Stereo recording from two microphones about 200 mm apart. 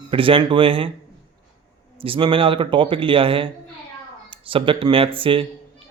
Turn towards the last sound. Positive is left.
turn(degrees=-25)  # may be behind; listen again after turning